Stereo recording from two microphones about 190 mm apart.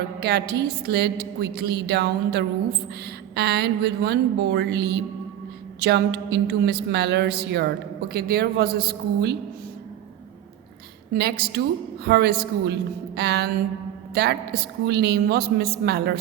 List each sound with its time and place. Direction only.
0.2 s a woman's voice: 60° right (ahead or behind)
11.1 s a woman's voice: 55° right (ahead or behind)